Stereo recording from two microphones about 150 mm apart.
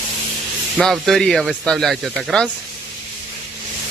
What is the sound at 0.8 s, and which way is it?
Speech, centre (ahead or behind).